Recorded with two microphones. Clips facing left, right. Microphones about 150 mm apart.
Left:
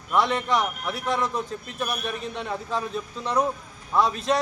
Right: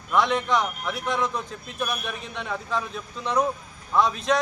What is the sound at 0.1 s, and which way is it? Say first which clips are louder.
A man's voice: right 1 dB; 5° left (ahead or behind).